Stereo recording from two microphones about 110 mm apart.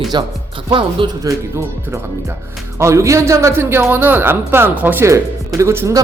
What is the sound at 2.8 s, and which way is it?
A man's voice, 25° right (ahead or behind).